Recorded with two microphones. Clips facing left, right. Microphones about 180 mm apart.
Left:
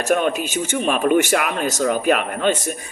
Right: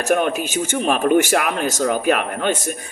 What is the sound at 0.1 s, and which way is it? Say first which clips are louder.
A man's voice: right 1 dB; 50° right (ahead or behind).